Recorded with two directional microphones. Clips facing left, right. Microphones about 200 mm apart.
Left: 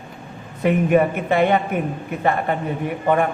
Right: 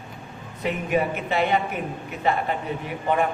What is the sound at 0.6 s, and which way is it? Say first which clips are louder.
A man's voice: left 7 dB; 55° left (ahead or behind).